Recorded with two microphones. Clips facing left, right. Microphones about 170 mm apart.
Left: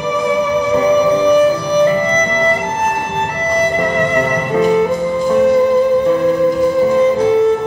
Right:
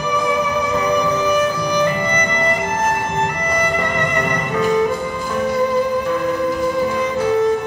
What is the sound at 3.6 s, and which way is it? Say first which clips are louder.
Music: left 7 dB; 30° left (ahead or behind).